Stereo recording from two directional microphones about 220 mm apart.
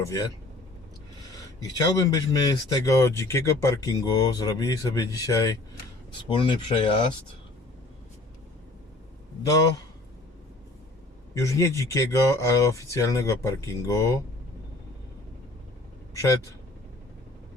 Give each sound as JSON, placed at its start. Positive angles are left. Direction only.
{"t": 0.0, "sound": "speech", "side_deg": 15}
{"t": 1.8, "sound": "speech", "side_deg": 15}
{"t": 9.4, "sound": "speech", "side_deg": 15}
{"t": 11.3, "sound": "speech", "side_deg": 15}